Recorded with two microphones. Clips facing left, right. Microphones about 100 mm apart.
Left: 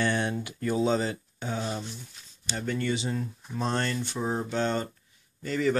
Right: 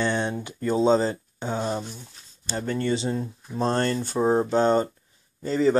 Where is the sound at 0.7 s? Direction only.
25° right (ahead or behind).